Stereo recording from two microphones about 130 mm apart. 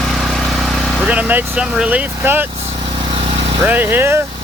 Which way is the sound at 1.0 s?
10° right (ahead or behind).